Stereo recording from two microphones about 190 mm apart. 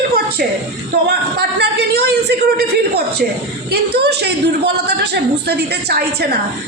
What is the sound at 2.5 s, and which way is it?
A woman's voice, 60° right (ahead or behind).